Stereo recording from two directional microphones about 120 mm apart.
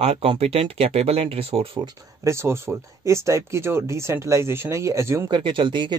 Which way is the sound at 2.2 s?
20° right (ahead or behind).